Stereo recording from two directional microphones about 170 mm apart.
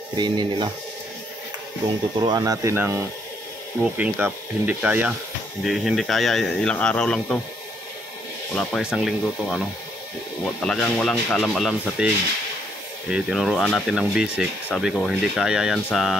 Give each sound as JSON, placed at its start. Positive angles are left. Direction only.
{"t": 0.2, "sound": "speech", "side_deg": -25}
{"t": 2.1, "sound": "speech", "side_deg": -25}
{"t": 8.5, "sound": "speech", "side_deg": 0}
{"t": 13.1, "sound": "speech", "side_deg": 0}